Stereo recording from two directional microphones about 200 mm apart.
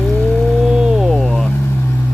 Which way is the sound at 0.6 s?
5° right (ahead or behind).